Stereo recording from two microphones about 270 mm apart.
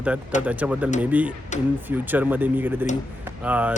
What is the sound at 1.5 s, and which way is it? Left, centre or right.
Speech, left.